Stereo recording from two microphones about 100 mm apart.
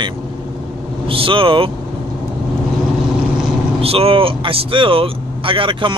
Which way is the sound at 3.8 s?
75° right (ahead or behind).